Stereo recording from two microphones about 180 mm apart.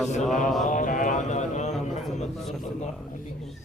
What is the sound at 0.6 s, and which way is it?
Mantra, 45° left (ahead or behind).